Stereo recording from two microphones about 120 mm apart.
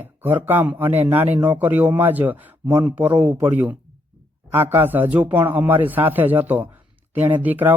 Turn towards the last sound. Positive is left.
turn(degrees=-15)  # may be behind; listen again after turning